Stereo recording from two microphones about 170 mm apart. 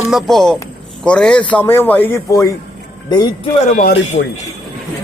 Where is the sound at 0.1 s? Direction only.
Centre (ahead or behind); by 2.5 s 15° left (ahead or behind).